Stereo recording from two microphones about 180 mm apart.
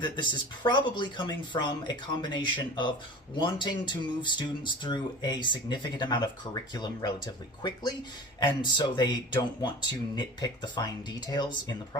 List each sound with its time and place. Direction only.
0.0 s speech: 25° left (ahead or behind)